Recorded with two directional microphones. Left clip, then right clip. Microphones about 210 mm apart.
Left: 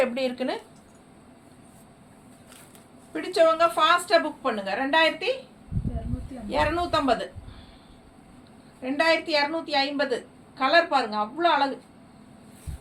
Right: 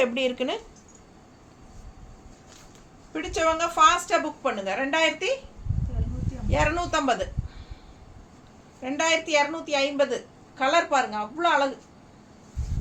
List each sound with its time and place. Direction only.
0.0 s a woman's voice: 15° right (ahead or behind)
3.1 s a woman's voice: 10° right (ahead or behind)
6.5 s a woman's voice: 10° right (ahead or behind)
8.8 s a woman's voice: 10° right (ahead or behind)